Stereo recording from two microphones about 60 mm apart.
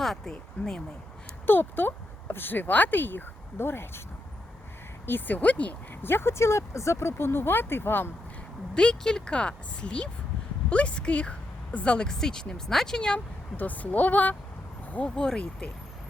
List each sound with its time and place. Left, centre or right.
0.0 s speech: centre
1.5 s speech: left
5.0 s speech: left
6.0 s speech: left
8.7 s speech: centre
13.1 s speech: left
14.9 s speech: centre